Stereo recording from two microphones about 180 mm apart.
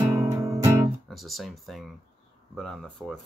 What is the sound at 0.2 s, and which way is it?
Music, 15° right (ahead or behind).